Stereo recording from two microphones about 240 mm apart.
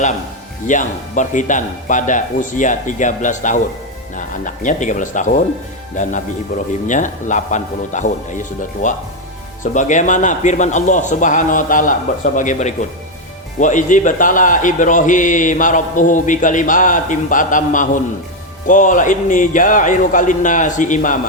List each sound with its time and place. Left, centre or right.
0.7 s a man's voice: left